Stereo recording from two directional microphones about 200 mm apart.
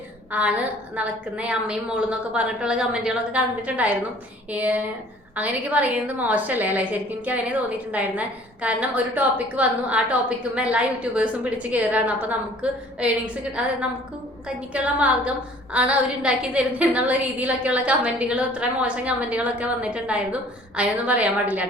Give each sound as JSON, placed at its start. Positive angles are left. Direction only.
{"t": 0.3, "sound": "a woman's voice", "side_deg": -10}
{"t": 14.4, "sound": "a woman's voice", "side_deg": -5}